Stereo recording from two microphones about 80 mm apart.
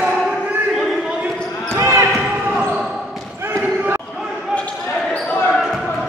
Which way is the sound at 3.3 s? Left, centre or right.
Right.